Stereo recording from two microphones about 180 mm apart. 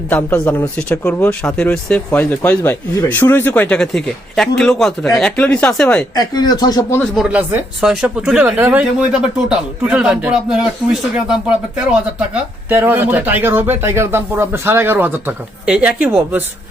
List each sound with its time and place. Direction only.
0.1 s speech: 10° left (ahead or behind)
6.1 s speech: 20° left (ahead or behind)
7.0 s speech: 5° right (ahead or behind)
12.3 s speech: 10° right (ahead or behind)